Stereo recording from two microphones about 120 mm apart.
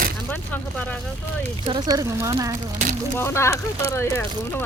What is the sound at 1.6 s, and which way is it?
Speech, 35° right (ahead or behind).